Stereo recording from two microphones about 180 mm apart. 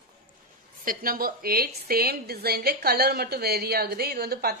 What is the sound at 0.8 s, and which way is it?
A woman's voice, 50° right (ahead or behind).